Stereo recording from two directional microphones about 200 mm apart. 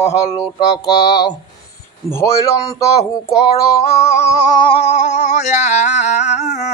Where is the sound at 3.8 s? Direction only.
15° left (ahead or behind).